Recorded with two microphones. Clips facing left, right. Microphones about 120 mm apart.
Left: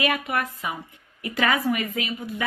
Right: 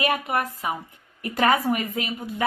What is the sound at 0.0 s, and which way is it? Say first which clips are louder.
A woman's voice: right 1 dB; 35° right (ahead or behind).